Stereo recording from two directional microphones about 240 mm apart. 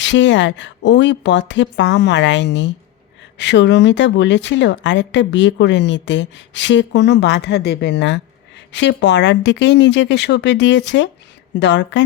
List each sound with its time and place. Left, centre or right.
0.0 s a woman's voice: left